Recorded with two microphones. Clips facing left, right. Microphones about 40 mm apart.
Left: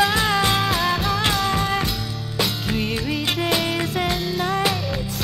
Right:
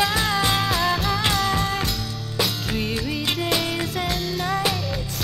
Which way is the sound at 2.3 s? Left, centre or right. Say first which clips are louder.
Left 1 dB; centre.